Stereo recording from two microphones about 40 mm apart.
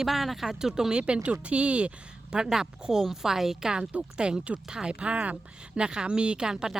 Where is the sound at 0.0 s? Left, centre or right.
Centre; by 1.9 s right.